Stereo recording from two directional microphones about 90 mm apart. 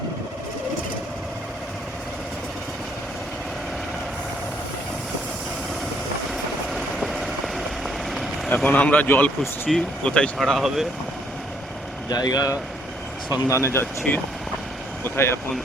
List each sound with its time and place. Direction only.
6.3 s vehicle: centre (ahead or behind)
8.4 s speech: 15° left (ahead or behind)
9.6 s speech: 10° left (ahead or behind)
12.0 s speech: 50° left (ahead or behind)
13.3 s speech: 35° left (ahead or behind)